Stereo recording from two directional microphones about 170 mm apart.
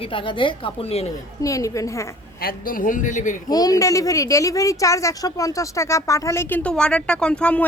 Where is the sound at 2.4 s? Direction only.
55° left (ahead or behind).